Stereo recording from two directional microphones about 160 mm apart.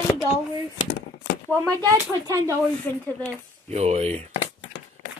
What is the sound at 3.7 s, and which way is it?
Speech, 45° right (ahead or behind).